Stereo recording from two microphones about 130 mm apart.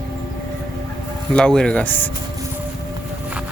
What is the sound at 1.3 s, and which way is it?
Speech, 5° left (ahead or behind).